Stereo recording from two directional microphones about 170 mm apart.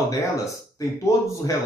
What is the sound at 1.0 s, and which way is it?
Speech, 15° left (ahead or behind).